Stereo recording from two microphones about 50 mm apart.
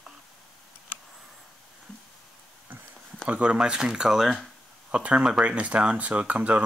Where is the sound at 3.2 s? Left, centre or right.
Right; by 4.4 s centre.